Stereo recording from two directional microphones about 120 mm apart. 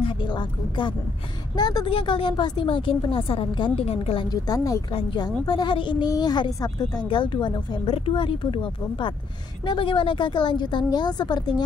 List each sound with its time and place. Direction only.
0.0 s a woman's voice: 40° left (ahead or behind)
1.9 s a woman's voice: 45° left (ahead or behind)
3.8 s a woman's voice: 55° left (ahead or behind)
4.9 s a woman's voice: 40° left (ahead or behind)
7.8 s a woman's voice: 50° left (ahead or behind)
9.7 s a woman's voice: 45° left (ahead or behind)